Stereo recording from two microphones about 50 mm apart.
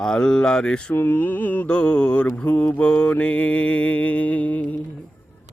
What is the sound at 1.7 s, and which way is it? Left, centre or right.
Mantra, left.